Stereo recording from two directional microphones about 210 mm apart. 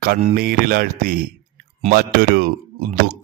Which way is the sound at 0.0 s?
40° right (ahead or behind).